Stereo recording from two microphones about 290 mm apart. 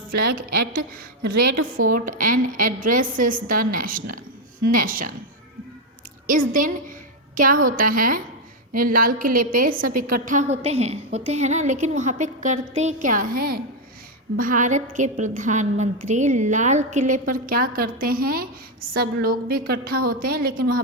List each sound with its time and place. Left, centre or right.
0.1 s a woman's voice: right
1.2 s a woman's voice: right
1.5 s a woman's voice: right
6.2 s a woman's voice: right